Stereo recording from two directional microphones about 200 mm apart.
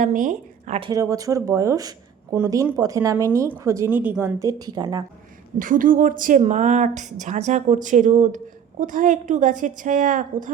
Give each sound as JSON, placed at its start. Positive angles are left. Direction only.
{"t": 0.0, "sound": "speech", "side_deg": -40}
{"t": 0.8, "sound": "a woman's voice", "side_deg": -20}
{"t": 5.5, "sound": "a woman's voice", "side_deg": -40}